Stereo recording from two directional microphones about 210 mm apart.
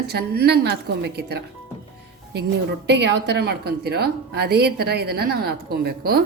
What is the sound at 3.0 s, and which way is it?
A woman's voice, 55° right (ahead or behind).